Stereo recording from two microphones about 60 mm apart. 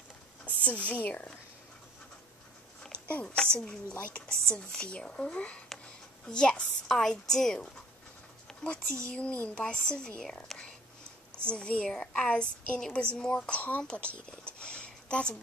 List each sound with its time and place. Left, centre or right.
0.5 s a woman's voice: left
3.3 s a woman's voice: centre
6.9 s a woman's voice: centre
8.5 s a sound: centre
9.0 s a woman's voice: centre
11.4 s a woman's voice: centre
14.4 s a sound: centre